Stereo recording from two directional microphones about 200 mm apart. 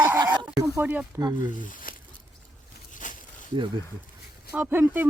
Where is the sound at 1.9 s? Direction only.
45° left (ahead or behind).